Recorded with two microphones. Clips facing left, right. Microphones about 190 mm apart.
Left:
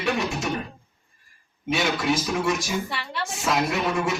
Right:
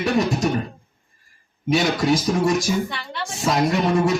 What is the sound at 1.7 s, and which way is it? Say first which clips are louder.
Speech: right 5 dB; 40° right (ahead or behind).